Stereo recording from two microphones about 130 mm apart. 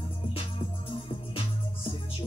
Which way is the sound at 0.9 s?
40° left (ahead or behind).